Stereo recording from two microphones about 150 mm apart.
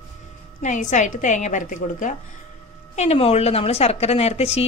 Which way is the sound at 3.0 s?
40° left (ahead or behind).